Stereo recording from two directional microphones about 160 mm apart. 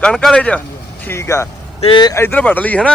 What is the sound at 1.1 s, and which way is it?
Speech, 20° left (ahead or behind).